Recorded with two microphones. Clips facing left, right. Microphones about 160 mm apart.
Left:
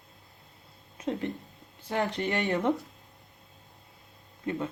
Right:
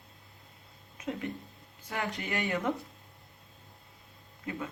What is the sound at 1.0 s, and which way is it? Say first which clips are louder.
Speech: left 4 dB; 35° left (ahead or behind).